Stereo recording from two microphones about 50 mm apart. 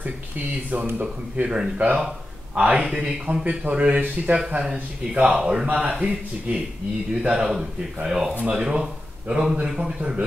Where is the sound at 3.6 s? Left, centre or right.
Right.